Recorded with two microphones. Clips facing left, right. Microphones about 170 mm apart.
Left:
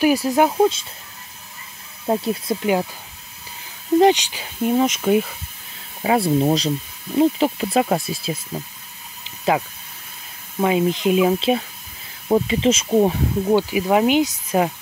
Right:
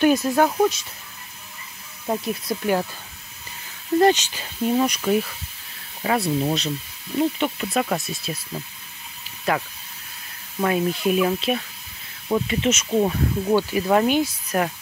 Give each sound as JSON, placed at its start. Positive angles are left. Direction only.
{"t": 0.0, "sound": "speech", "side_deg": 10}
{"t": 2.0, "sound": "speech", "side_deg": 25}
{"t": 4.0, "sound": "speech", "side_deg": 15}
{"t": 10.6, "sound": "speech", "side_deg": 15}
{"t": 11.3, "sound": "speech", "side_deg": 30}
{"t": 12.9, "sound": "speech", "side_deg": 20}